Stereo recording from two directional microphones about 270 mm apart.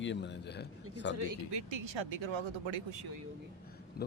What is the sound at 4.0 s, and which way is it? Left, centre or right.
Speech, left.